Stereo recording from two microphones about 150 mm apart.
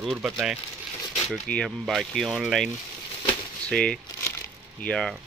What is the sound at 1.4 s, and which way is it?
Speech, 10° left (ahead or behind).